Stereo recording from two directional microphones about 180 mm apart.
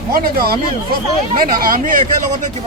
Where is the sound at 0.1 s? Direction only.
55° right (ahead or behind).